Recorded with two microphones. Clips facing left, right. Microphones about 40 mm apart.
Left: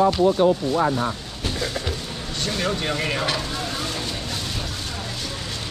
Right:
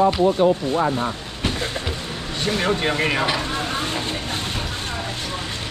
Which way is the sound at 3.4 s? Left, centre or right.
Right.